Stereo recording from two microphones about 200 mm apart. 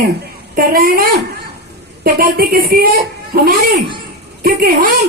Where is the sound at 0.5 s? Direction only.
45° right (ahead or behind).